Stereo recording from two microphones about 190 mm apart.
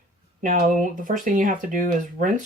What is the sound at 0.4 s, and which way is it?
Speech, 45° right (ahead or behind).